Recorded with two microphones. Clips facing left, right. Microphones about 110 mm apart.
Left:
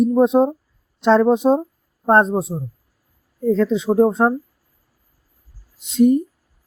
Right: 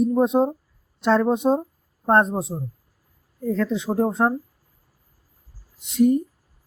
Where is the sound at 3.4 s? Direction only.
20° left (ahead or behind).